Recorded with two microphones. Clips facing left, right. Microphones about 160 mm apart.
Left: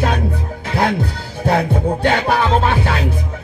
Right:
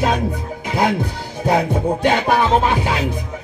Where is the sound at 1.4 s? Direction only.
15° right (ahead or behind).